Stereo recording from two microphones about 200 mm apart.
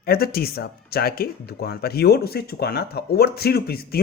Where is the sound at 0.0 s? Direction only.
50° left (ahead or behind).